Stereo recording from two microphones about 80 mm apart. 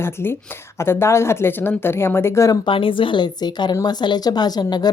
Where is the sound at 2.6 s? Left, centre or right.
Left.